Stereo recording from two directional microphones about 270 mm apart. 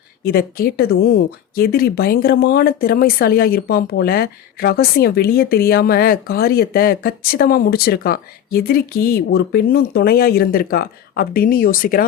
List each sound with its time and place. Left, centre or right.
0.3 s speech: left